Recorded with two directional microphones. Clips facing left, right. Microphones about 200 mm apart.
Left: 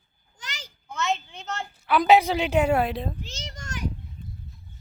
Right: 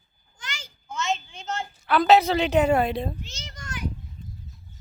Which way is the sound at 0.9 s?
60° left (ahead or behind).